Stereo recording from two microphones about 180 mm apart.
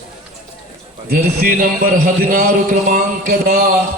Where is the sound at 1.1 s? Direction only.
50° right (ahead or behind).